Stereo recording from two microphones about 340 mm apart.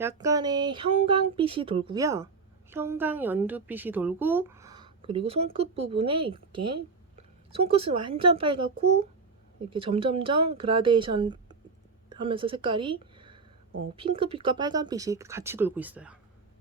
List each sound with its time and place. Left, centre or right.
0.0 s a woman's voice: centre